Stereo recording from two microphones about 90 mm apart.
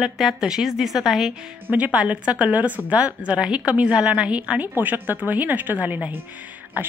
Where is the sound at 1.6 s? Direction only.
15° right (ahead or behind).